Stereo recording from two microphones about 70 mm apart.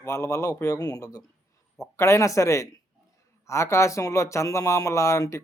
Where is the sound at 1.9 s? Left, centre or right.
Left.